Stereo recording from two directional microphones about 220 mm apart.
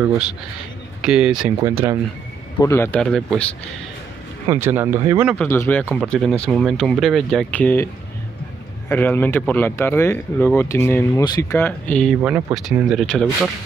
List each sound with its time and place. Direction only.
1.0 s speech: 5° right (ahead or behind)
2.6 s speech: 10° left (ahead or behind)
4.5 s speech: 10° right (ahead or behind)
5.4 s speech: 10° left (ahead or behind)
12.2 s speech: 10° right (ahead or behind)